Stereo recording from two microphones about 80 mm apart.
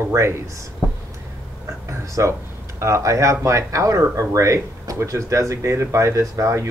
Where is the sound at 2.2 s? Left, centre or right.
Right.